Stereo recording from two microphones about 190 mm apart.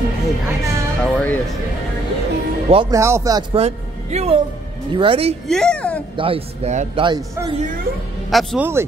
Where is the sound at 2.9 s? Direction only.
15° right (ahead or behind).